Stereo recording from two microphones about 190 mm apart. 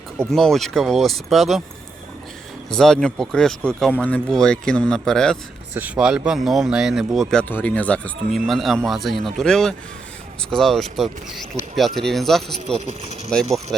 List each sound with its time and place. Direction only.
0.3 s speech: centre (ahead or behind)
2.6 s speech: 5° left (ahead or behind)
5.7 s speech: 10° right (ahead or behind)
12.7 s speech: 35° right (ahead or behind)
13.3 s speech: centre (ahead or behind)